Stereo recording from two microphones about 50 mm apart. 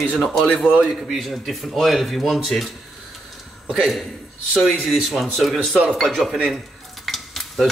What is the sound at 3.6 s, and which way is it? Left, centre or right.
A man's voice, centre.